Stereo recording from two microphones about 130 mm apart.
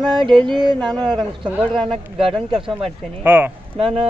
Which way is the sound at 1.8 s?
45° right (ahead or behind).